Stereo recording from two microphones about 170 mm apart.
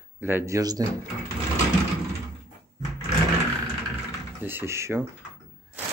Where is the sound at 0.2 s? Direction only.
15° right (ahead or behind).